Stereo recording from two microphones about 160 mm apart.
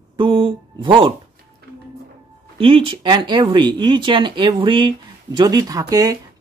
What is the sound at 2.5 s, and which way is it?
Speech, 35° right (ahead or behind).